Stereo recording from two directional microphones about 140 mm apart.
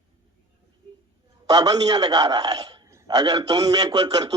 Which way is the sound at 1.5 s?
30° right (ahead or behind).